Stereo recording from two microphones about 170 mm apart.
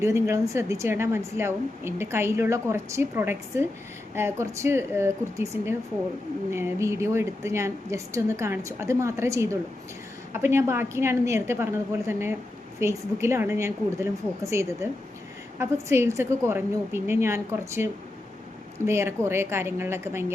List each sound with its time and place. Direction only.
0.0 s a woman's voice: 15° right (ahead or behind)
18.9 s a woman's voice: 15° right (ahead or behind)